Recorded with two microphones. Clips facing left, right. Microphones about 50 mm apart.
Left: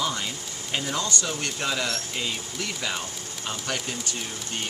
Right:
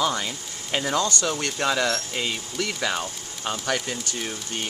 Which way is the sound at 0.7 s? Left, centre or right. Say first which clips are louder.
Right 4 dB; right.